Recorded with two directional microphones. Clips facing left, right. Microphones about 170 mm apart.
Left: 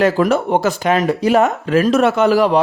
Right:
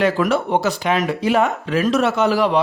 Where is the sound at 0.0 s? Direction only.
45° left (ahead or behind).